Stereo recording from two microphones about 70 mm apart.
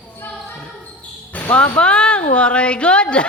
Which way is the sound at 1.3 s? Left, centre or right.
Left.